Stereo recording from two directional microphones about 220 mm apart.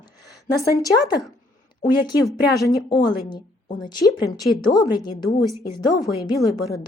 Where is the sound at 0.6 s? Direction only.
15° left (ahead or behind).